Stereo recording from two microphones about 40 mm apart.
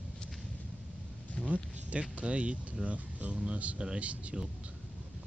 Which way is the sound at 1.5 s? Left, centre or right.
Right.